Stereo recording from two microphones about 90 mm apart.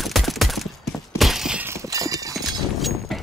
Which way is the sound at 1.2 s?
5° right (ahead or behind).